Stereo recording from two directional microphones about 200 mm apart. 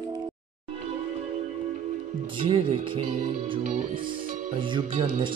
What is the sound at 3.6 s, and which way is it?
Speech, 40° right (ahead or behind).